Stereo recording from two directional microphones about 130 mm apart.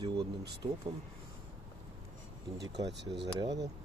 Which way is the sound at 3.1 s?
30° right (ahead or behind).